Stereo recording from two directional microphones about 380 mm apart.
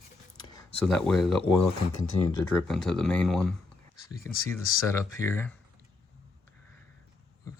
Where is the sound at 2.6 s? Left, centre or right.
Centre.